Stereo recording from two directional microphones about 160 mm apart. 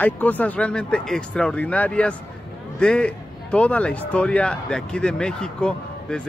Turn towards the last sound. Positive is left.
turn(degrees=5)  # may be behind; listen again after turning